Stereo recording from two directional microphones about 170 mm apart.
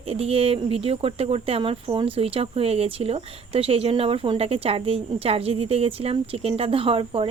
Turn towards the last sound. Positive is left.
turn(degrees=-30)  # may be behind; listen again after turning